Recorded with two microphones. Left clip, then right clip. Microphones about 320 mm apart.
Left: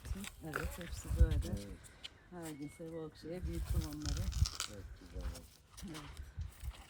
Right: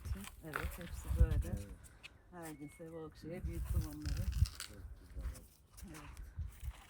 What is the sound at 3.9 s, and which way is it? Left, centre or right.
Speech, centre.